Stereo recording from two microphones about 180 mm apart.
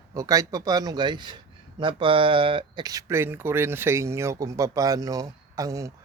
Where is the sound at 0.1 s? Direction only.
20° right (ahead or behind).